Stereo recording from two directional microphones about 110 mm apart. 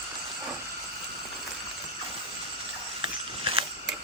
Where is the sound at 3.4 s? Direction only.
55° right (ahead or behind).